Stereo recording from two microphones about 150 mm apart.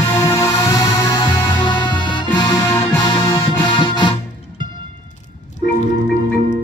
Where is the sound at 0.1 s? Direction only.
20° left (ahead or behind).